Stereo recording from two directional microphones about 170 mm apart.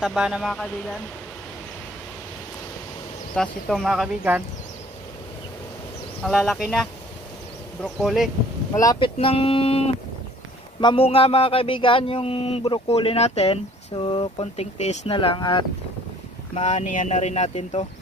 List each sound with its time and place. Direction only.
0.0 s speech: 5° right (ahead or behind)
3.3 s speech: centre (ahead or behind)
6.2 s speech: centre (ahead or behind)
8.7 s speech: 20° left (ahead or behind)
9.2 s a sound: 30° left (ahead or behind)
16.5 s a sound: 40° left (ahead or behind)